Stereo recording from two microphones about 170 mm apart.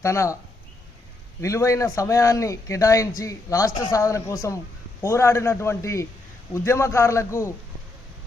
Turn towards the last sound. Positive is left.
turn(degrees=15)  # may be behind; listen again after turning